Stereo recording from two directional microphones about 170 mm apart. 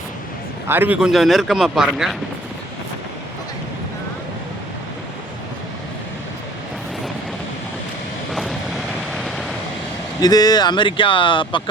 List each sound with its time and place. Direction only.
0.7 s speech: 10° right (ahead or behind)
8.3 s vehicle: centre (ahead or behind)
10.2 s speech: 20° left (ahead or behind)